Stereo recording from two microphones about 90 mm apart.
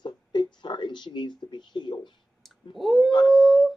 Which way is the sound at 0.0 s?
60° left (ahead or behind).